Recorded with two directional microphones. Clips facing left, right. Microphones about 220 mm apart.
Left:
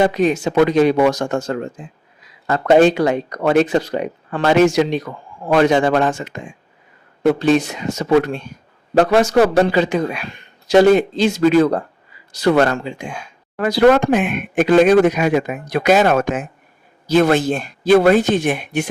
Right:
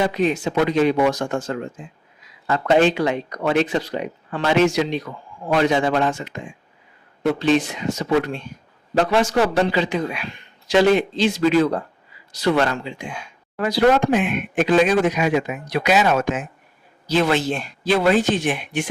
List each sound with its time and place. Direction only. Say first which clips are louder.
0.0 s speech: left 4 dB; 45° left (ahead or behind)